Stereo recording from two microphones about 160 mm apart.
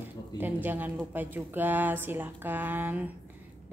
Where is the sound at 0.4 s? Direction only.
10° right (ahead or behind).